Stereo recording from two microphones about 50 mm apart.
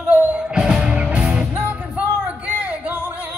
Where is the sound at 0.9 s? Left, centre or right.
Right.